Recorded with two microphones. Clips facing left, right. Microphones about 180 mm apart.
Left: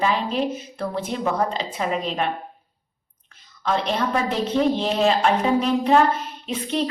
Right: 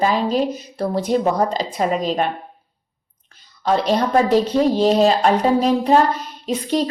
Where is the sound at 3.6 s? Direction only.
35° right (ahead or behind).